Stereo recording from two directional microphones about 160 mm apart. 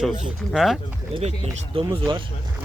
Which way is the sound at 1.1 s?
35° right (ahead or behind).